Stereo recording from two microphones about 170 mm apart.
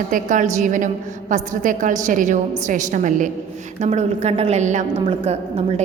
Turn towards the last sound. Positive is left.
turn(degrees=-35)  # may be behind; listen again after turning